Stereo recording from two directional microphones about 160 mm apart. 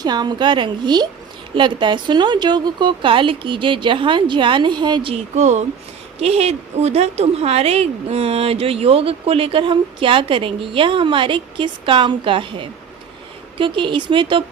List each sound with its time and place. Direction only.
0.0 s a woman's voice: 25° right (ahead or behind)
5.4 s a woman's voice: 45° right (ahead or behind)